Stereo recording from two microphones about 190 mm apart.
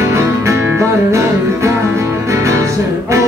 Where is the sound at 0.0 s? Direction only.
15° right (ahead or behind).